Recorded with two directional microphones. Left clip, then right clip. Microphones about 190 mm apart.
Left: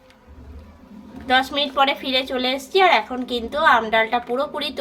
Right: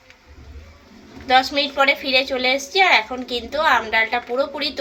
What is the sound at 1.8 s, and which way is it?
A woman's voice, 55° left (ahead or behind).